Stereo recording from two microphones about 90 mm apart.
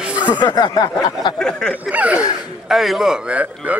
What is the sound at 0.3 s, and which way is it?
Speech, 55° left (ahead or behind).